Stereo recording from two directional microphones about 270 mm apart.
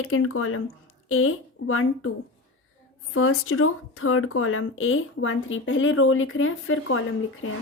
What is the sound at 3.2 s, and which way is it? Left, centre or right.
Speech, left.